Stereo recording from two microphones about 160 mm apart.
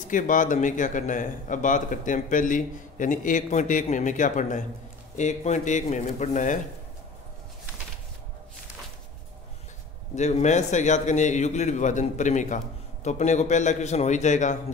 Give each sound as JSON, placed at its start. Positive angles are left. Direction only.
{"t": 0.1, "sound": "speech", "side_deg": 55}
{"t": 10.1, "sound": "speech", "side_deg": 45}